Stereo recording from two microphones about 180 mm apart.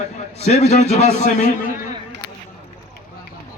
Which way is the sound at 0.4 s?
40° left (ahead or behind).